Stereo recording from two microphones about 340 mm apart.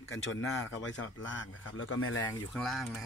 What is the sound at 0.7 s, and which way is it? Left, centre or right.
Speech, left.